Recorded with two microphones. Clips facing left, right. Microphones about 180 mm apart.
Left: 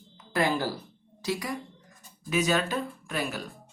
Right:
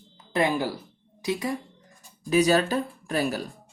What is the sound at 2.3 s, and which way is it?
Speech, 35° right (ahead or behind).